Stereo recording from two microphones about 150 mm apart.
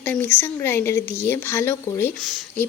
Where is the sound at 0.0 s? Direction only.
10° left (ahead or behind).